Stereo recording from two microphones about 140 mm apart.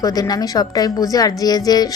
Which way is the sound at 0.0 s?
25° left (ahead or behind).